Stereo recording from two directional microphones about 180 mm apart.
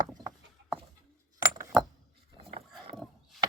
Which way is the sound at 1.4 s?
20° right (ahead or behind).